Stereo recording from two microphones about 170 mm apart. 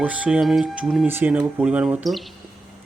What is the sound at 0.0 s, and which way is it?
Speech, 10° right (ahead or behind).